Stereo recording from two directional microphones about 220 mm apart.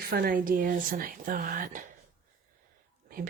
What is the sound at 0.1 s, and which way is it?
Speech, 40° right (ahead or behind).